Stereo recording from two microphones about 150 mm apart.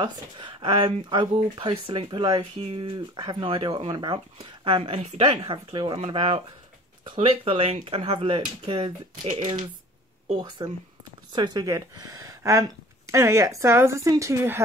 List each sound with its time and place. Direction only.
0.0 s a woman's voice: 30° right (ahead or behind)